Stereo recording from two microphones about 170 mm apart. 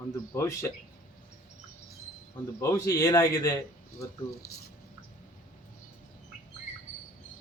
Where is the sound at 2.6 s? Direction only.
20° left (ahead or behind).